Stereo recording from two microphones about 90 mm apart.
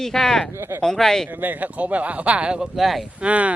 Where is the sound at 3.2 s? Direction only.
15° right (ahead or behind).